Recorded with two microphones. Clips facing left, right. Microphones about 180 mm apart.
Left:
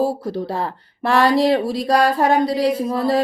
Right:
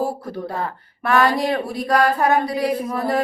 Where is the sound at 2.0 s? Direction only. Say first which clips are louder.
Even; 25° left (ahead or behind).